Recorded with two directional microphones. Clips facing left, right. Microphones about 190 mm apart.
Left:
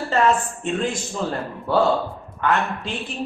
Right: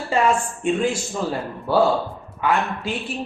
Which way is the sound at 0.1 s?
10° right (ahead or behind).